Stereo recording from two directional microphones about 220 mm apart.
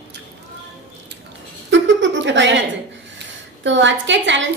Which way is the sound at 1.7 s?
55° right (ahead or behind).